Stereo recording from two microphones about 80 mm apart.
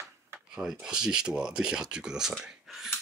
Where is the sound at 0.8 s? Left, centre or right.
Centre.